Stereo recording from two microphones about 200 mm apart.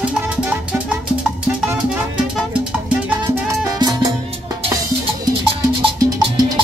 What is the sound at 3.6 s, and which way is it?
Music, 20° right (ahead or behind).